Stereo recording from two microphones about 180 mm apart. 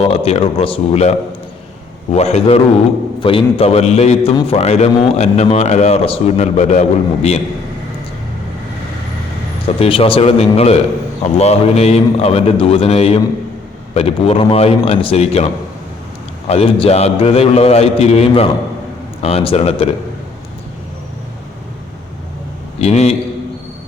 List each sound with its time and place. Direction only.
0.1 s a man's voice: 35° left (ahead or behind)
2.1 s a man's voice: 35° left (ahead or behind)
9.8 s a man's voice: 30° left (ahead or behind)
16.5 s a man's voice: 35° left (ahead or behind)
22.8 s a man's voice: 35° left (ahead or behind)